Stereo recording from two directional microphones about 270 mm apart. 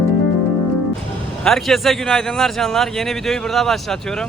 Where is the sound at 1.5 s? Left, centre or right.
Centre.